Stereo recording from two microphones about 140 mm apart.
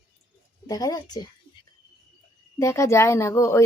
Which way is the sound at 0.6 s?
30° left (ahead or behind).